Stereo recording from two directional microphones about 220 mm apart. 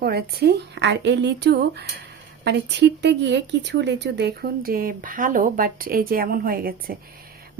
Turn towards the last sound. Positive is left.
turn(degrees=-40)  # may be behind; listen again after turning